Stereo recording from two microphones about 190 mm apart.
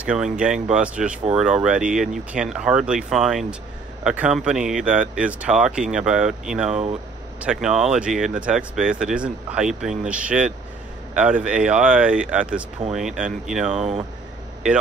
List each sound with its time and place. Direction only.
0.0 s speech: 5° right (ahead or behind)
13.7 s speech: 35° right (ahead or behind)